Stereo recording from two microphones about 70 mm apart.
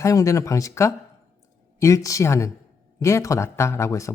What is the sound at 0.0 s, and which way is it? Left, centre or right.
Speech, left.